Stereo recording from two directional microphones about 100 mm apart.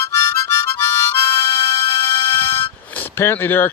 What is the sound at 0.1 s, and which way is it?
Harmonica, 30° left (ahead or behind).